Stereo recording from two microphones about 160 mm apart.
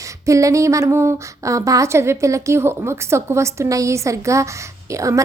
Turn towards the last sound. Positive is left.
turn(degrees=-20)  # may be behind; listen again after turning